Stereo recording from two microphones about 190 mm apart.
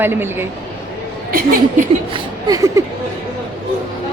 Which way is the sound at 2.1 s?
20° right (ahead or behind).